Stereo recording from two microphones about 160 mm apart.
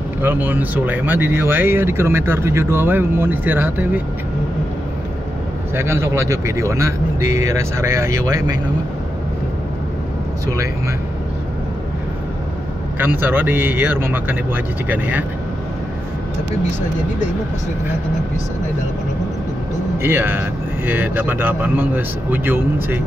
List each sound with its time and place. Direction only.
0.2 s speech: 10° right (ahead or behind)
5.8 s speech: 15° right (ahead or behind)
13.0 s speech: 10° right (ahead or behind)
20.0 s speech: 15° right (ahead or behind)